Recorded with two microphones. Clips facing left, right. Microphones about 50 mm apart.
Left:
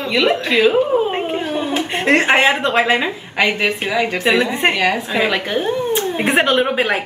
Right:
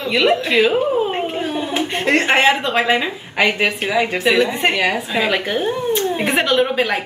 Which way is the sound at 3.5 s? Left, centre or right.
Centre.